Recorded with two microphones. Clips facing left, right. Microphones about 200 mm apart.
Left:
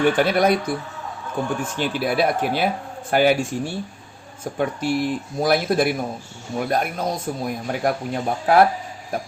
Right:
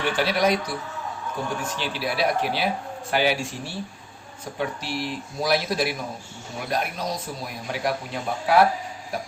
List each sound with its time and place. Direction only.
0.0 s a man's voice: 50° left (ahead or behind)